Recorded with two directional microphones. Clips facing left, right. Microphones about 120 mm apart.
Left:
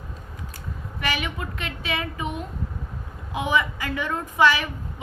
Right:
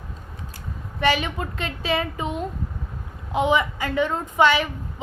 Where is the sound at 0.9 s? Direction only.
30° right (ahead or behind).